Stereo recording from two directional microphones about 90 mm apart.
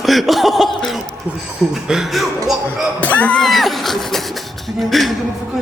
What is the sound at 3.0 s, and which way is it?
Speech, 15° left (ahead or behind).